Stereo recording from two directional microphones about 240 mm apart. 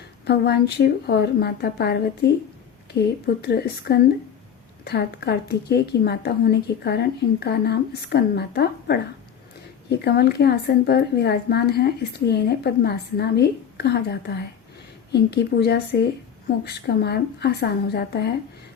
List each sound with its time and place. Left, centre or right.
0.3 s speech: left
3.4 s speech: left